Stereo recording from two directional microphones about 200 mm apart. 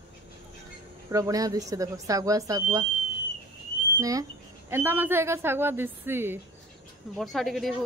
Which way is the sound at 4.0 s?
15° right (ahead or behind).